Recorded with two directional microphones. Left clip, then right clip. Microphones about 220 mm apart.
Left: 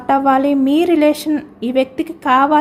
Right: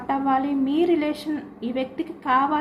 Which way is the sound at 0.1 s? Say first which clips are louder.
Left 10 dB; 55° left (ahead or behind).